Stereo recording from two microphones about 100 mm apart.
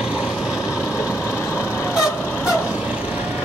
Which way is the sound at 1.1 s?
25° left (ahead or behind).